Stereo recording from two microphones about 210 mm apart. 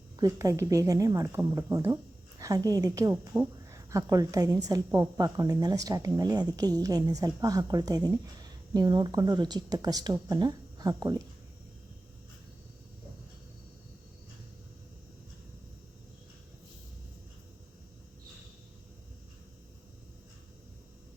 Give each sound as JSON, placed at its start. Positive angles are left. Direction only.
{"t": 0.2, "sound": "a woman's voice", "side_deg": -15}